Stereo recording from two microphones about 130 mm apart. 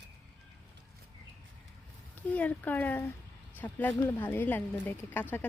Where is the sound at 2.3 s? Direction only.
10° left (ahead or behind).